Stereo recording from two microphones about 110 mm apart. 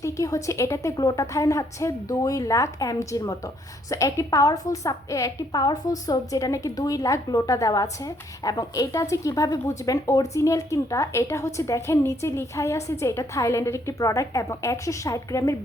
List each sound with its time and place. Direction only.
0.0 s a woman's voice: 30° left (ahead or behind)